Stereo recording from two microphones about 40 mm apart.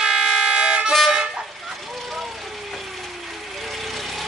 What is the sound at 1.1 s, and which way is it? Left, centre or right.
Toot, centre.